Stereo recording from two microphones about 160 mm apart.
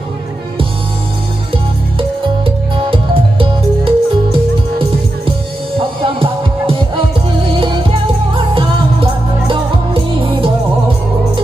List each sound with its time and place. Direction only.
1.5 s music: 35° right (ahead or behind)